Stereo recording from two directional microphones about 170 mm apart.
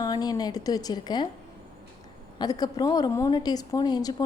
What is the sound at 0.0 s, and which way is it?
A woman's voice, 25° left (ahead or behind).